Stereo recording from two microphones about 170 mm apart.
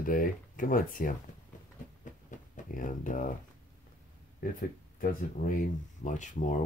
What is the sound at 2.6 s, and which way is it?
Speech, 50° left (ahead or behind).